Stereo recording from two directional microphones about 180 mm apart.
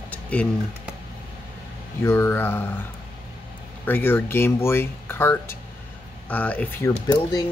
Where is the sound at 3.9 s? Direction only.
10° left (ahead or behind).